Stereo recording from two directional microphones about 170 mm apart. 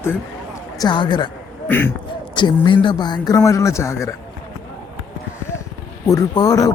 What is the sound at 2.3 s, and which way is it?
Speech, 30° left (ahead or behind).